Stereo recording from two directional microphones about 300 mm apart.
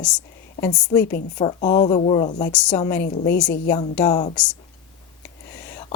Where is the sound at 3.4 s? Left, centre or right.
Left.